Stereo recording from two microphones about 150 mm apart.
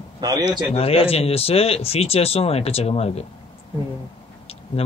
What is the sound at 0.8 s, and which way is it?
Speech, 40° left (ahead or behind).